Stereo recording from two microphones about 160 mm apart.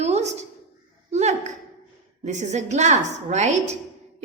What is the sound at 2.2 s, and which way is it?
A woman's voice, 45° right (ahead or behind).